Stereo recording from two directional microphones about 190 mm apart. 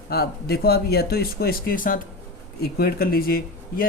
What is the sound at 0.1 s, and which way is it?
Speech, 55° left (ahead or behind).